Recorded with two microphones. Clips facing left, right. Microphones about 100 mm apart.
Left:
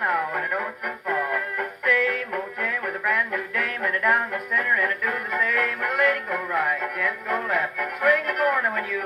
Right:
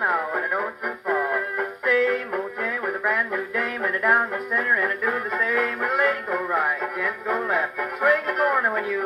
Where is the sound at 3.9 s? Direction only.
10° right (ahead or behind).